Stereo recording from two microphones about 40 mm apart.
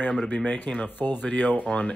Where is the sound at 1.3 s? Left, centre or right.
Left.